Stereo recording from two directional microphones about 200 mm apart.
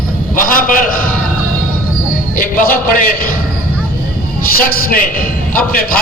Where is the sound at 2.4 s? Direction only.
45° left (ahead or behind).